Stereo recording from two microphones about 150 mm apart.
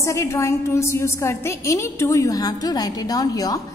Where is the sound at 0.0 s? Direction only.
20° left (ahead or behind).